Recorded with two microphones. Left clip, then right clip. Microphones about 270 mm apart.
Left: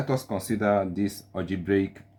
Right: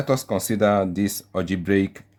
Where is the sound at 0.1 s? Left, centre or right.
Right.